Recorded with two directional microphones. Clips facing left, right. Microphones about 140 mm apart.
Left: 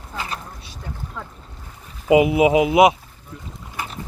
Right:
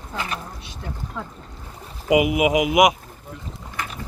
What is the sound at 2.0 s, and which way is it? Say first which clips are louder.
Speech: left 3 dB; 30° left (ahead or behind).